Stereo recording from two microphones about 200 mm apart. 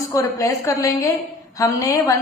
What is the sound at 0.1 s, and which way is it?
A woman's voice, 15° left (ahead or behind).